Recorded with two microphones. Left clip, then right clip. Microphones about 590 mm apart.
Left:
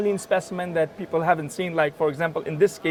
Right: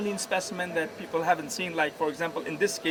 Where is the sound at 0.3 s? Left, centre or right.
Left.